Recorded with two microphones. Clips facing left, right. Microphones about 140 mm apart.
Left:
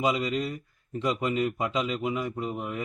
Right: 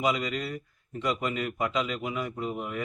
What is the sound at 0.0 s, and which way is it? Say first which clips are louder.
A man's voice: left 2 dB; 25° left (ahead or behind).